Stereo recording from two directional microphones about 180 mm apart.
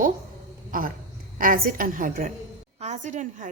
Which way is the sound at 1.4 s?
50° right (ahead or behind).